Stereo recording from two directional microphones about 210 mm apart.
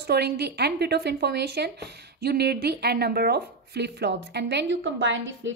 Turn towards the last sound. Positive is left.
turn(degrees=-60)  # may be behind; listen again after turning